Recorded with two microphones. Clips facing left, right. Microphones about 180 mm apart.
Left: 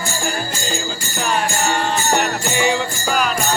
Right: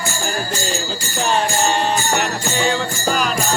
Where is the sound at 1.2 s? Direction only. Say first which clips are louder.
Right 2 dB; 30° right (ahead or behind).